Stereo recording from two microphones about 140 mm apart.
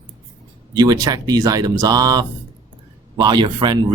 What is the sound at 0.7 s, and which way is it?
Speech, 30° right (ahead or behind).